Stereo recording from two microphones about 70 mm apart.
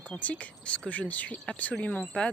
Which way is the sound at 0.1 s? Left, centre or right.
Centre.